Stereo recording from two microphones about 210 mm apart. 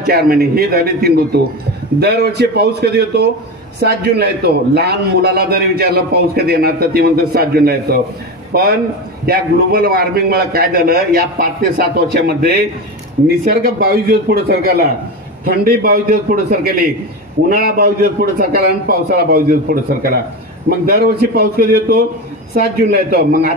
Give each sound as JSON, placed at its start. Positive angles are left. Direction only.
{"t": 0.0, "sound": "a man's voice", "side_deg": -45}
{"t": 17.5, "sound": "a man's voice", "side_deg": -45}